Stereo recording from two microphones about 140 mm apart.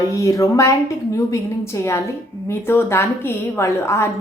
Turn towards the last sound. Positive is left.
turn(degrees=20)  # may be behind; listen again after turning